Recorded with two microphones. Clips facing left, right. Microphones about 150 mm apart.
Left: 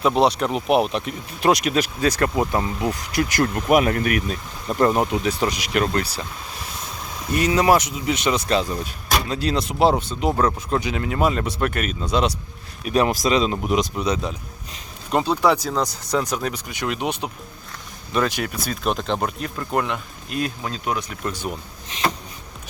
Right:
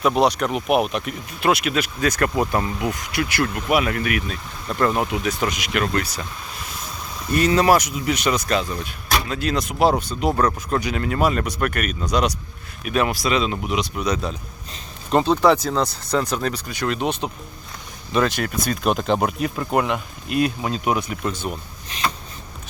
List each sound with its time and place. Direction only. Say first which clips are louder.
0.2 s speech: even; 30° left (ahead or behind)
2.8 s speech: left 1 dB; 35° left (ahead or behind)
7.3 s speech: right 1 dB; 15° left (ahead or behind)
12.8 s speech: left 2 dB; 35° left (ahead or behind)
13.9 s speech: even; 25° left (ahead or behind)
18.3 s speech: right 3 dB; 10° left (ahead or behind)
18.8 s speech: right 3 dB; 5° right (ahead or behind)
21.8 s a sound: left 2 dB; 20° left (ahead or behind)